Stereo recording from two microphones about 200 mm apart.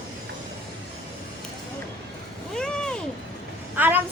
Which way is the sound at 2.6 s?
5° left (ahead or behind).